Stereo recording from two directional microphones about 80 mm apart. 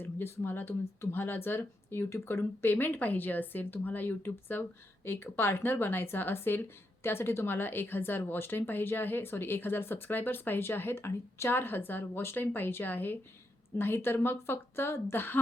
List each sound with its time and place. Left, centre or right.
0.0 s speech: left